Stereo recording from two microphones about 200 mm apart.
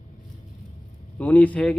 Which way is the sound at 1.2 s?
5° left (ahead or behind).